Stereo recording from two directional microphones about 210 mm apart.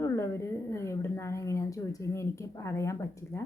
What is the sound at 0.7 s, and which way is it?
A woman's voice, 15° left (ahead or behind).